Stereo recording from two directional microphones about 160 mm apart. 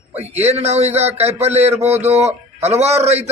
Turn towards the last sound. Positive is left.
turn(degrees=-40)  # may be behind; listen again after turning